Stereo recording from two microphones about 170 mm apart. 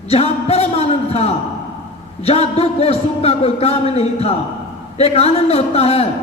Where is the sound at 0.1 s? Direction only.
35° left (ahead or behind).